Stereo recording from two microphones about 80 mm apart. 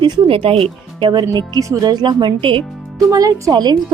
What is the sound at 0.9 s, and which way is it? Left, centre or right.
Speech, right.